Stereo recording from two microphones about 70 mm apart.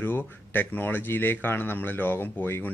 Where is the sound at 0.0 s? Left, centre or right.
Left.